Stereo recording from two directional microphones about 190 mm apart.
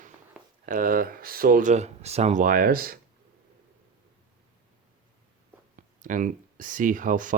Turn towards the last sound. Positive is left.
turn(degrees=-45)  # may be behind; listen again after turning